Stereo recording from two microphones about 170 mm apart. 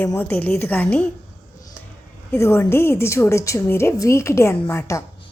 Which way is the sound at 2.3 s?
15° left (ahead or behind).